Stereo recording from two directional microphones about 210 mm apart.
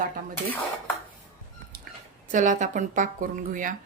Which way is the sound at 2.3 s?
35° right (ahead or behind).